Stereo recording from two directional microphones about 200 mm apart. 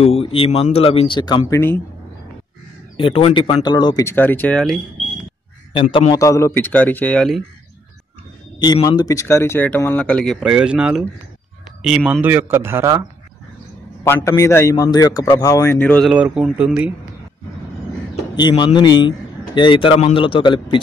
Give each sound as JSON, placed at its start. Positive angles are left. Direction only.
{"t": 0.0, "sound": "a man's voice", "side_deg": 30}
{"t": 3.0, "sound": "a man's voice", "side_deg": 25}
{"t": 5.7, "sound": "a man's voice", "side_deg": 25}
{"t": 6.2, "sound": "a man's voice", "side_deg": 15}
{"t": 8.6, "sound": "a man's voice", "side_deg": 20}
{"t": 14.0, "sound": "a man's voice", "side_deg": 15}
{"t": 18.3, "sound": "a man's voice", "side_deg": 20}